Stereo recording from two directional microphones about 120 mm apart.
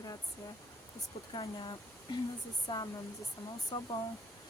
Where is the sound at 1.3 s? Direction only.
50° left (ahead or behind).